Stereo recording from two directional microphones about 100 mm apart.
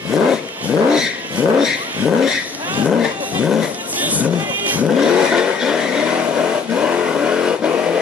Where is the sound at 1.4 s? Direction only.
15° right (ahead or behind).